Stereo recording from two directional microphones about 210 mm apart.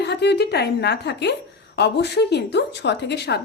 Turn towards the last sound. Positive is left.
turn(degrees=55)  # may be behind; listen again after turning